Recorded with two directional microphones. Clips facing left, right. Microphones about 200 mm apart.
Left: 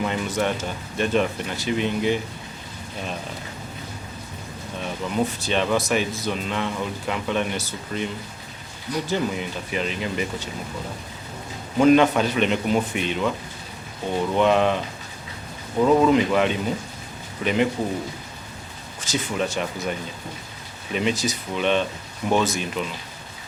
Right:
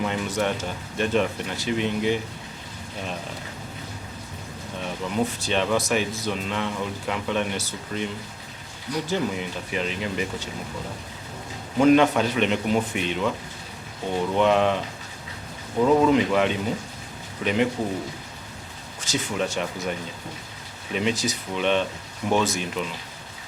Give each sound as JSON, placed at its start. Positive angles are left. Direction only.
{"t": 0.0, "sound": "speech", "side_deg": 10}
{"t": 4.8, "sound": "speech", "side_deg": 15}
{"t": 11.8, "sound": "speech", "side_deg": 15}
{"t": 19.0, "sound": "speech", "side_deg": 10}